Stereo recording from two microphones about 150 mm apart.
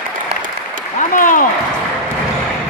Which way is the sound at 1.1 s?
65° left (ahead or behind).